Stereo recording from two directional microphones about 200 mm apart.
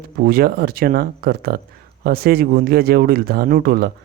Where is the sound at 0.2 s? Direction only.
45° right (ahead or behind).